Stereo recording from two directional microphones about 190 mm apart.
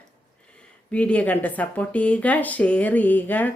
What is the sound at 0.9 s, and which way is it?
Speech, 5° left (ahead or behind).